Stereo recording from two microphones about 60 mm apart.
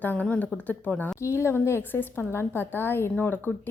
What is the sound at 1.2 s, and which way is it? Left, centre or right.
A woman's voice, left.